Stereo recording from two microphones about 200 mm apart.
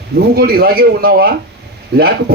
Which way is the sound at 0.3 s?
50° right (ahead or behind).